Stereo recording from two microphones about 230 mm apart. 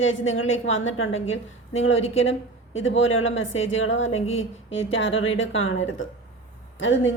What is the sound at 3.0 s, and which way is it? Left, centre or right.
A woman's voice, left.